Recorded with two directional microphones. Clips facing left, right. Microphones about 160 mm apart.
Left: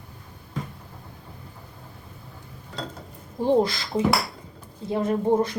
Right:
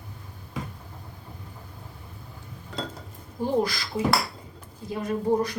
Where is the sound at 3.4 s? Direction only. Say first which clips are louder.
Left 4 dB; 25° left (ahead or behind).